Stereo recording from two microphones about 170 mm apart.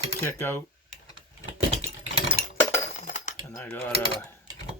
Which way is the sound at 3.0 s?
50° left (ahead or behind).